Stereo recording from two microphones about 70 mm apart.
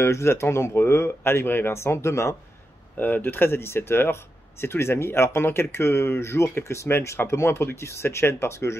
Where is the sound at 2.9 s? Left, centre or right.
Left.